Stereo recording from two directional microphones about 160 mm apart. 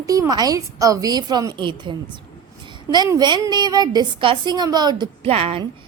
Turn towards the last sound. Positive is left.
turn(degrees=-35)  # may be behind; listen again after turning